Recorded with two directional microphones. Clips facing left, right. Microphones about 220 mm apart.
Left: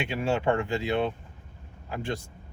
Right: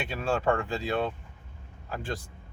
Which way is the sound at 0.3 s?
20° left (ahead or behind).